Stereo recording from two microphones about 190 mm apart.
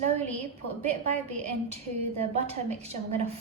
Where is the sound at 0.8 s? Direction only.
35° right (ahead or behind).